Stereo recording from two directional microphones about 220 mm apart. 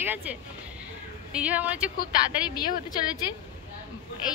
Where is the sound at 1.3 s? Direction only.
5° right (ahead or behind).